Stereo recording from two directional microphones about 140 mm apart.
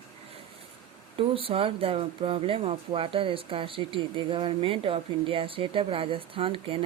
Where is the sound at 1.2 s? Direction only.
40° right (ahead or behind).